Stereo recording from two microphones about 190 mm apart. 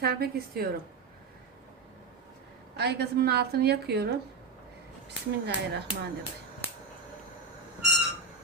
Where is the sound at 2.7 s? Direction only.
60° right (ahead or behind).